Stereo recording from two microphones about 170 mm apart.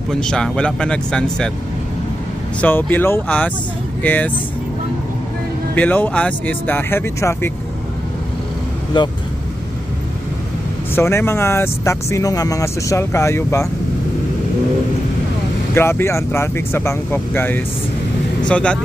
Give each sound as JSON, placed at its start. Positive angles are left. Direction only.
{"t": 0.1, "sound": "speech", "side_deg": 5}
{"t": 2.6, "sound": "speech", "side_deg": 10}
{"t": 5.8, "sound": "speech", "side_deg": 10}
{"t": 11.0, "sound": "speech", "side_deg": 15}
{"t": 15.7, "sound": "speech", "side_deg": 15}